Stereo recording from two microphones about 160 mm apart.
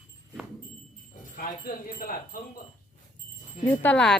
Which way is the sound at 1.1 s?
65° left (ahead or behind).